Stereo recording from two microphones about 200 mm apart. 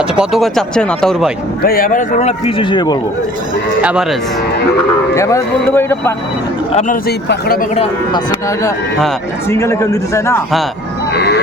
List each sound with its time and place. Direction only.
0.2 s speech: centre (ahead or behind)
1.6 s a man's voice: 45° left (ahead or behind); by 3.0 s 20° left (ahead or behind)
3.8 s cattle: 5° right (ahead or behind)
5.1 s speech: 15° left (ahead or behind)
6.7 s a man's voice: 40° left (ahead or behind)
7.8 s speech: 20° left (ahead or behind)
11.1 s vehicle: 55° left (ahead or behind)